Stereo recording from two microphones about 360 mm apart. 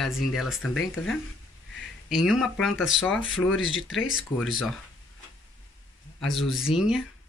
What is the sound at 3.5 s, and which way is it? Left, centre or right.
Speech, left.